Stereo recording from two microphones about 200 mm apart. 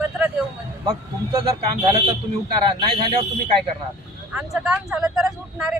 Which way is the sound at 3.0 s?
30° right (ahead or behind).